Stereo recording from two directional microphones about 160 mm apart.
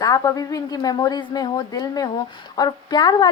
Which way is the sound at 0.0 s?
20° left (ahead or behind).